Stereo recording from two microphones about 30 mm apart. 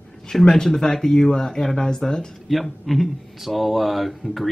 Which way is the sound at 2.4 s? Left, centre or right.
Centre.